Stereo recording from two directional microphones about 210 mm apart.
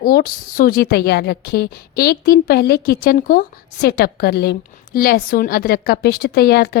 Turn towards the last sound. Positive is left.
turn(degrees=45)  # may be behind; listen again after turning